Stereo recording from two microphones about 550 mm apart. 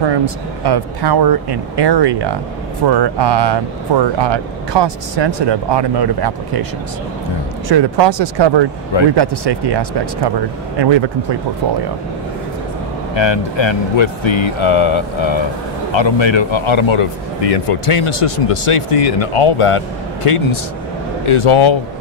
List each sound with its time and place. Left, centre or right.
0.0 s speech: right
7.6 s speech: right
13.1 s a man's voice: left